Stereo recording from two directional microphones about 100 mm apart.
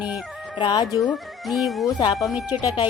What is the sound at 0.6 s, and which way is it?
Speech, 50° left (ahead or behind).